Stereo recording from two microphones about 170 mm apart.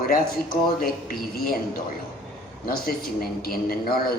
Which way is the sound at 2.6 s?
60° left (ahead or behind).